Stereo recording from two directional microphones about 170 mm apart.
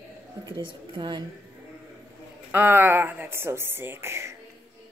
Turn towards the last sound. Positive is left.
turn(degrees=-15)  # may be behind; listen again after turning